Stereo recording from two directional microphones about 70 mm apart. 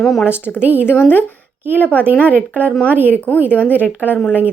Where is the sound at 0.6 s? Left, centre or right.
Right.